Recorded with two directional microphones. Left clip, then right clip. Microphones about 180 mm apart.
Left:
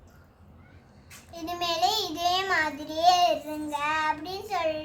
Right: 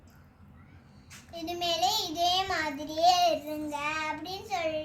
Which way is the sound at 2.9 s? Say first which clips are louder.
Left 2 dB; 15° left (ahead or behind).